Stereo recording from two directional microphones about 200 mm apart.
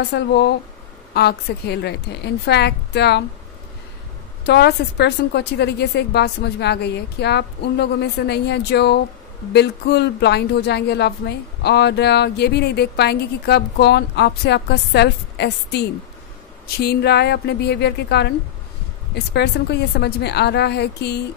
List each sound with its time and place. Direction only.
0.0 s a woman's voice: 55° left (ahead or behind)
4.5 s a woman's voice: 55° left (ahead or behind)